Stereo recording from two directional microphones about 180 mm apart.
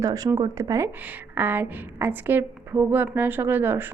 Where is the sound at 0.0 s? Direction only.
20° right (ahead or behind).